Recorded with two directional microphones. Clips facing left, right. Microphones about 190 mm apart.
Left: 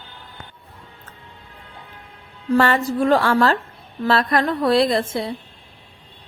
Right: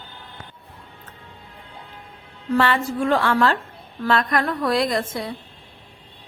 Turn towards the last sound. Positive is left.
turn(degrees=30)  # may be behind; listen again after turning